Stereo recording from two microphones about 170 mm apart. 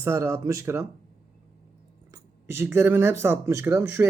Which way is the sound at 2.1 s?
15° right (ahead or behind).